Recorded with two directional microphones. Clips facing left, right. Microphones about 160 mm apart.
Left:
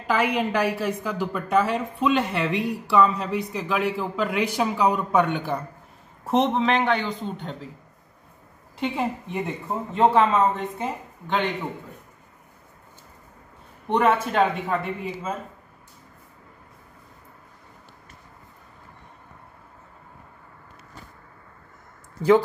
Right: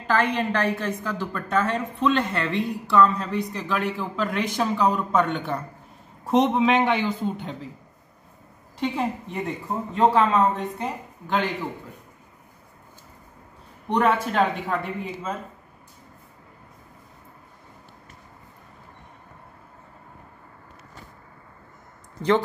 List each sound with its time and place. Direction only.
0.0 s a woman's voice: 10° left (ahead or behind)
8.7 s a man's voice: 5° left (ahead or behind)
13.8 s a man's voice: centre (ahead or behind)